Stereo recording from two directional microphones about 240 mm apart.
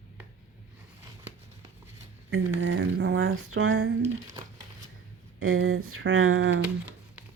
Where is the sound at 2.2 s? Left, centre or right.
Right.